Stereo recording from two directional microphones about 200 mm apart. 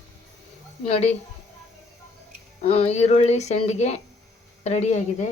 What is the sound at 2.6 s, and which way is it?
Speech, 30° left (ahead or behind).